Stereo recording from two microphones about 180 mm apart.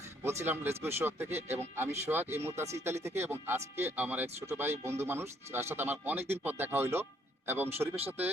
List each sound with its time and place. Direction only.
0.3 s speech: 10° right (ahead or behind)